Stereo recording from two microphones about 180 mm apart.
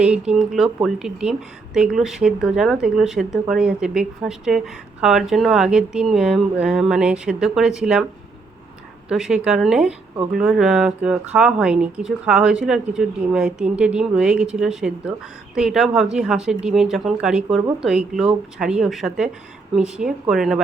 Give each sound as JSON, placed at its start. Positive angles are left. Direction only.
{"t": 0.0, "sound": "speech", "side_deg": -5}
{"t": 9.0, "sound": "speech", "side_deg": -5}